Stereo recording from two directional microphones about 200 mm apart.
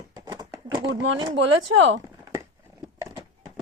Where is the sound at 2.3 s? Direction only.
15° right (ahead or behind).